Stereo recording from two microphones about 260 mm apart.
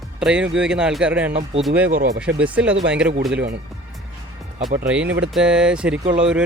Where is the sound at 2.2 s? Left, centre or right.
Centre.